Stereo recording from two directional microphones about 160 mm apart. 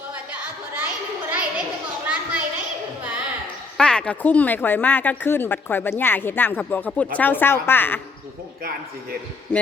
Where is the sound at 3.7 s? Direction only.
5° left (ahead or behind).